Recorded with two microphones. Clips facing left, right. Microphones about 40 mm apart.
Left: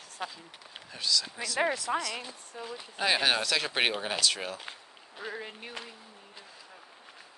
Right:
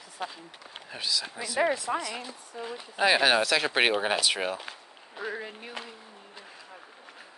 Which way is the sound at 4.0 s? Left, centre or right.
Right.